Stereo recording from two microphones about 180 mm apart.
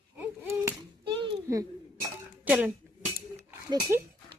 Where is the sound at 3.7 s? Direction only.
25° right (ahead or behind).